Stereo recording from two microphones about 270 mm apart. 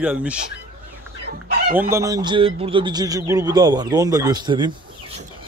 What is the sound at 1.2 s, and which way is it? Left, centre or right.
Chicken, right.